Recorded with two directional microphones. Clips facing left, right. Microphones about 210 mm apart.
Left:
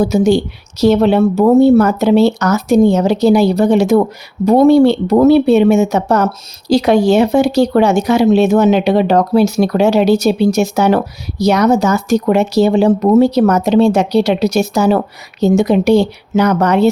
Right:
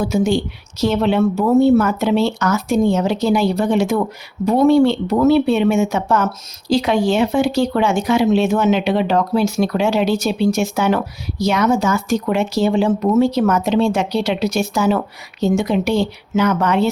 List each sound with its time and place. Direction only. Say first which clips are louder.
0.0 s speech: left 6 dB; 40° left (ahead or behind)